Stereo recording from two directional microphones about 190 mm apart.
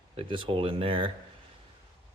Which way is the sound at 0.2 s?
25° right (ahead or behind).